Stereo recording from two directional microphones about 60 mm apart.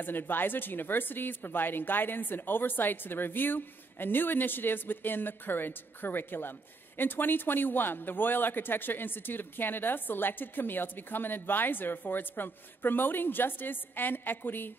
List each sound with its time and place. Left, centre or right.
0.0 s a man's voice: left